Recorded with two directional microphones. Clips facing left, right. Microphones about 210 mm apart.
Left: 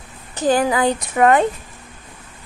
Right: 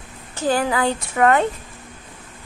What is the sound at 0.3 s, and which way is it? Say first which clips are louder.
A woman's voice: left 3 dB; 20° left (ahead or behind).